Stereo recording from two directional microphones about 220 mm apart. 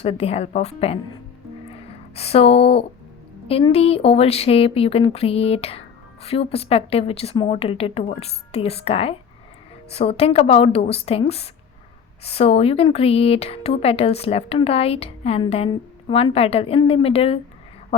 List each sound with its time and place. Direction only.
0.0 s speech: 25° left (ahead or behind)
2.1 s speech: 25° left (ahead or behind)